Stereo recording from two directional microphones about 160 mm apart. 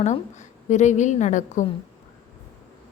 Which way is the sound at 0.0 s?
45° left (ahead or behind).